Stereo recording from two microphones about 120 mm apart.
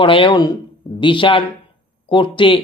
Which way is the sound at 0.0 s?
45° left (ahead or behind).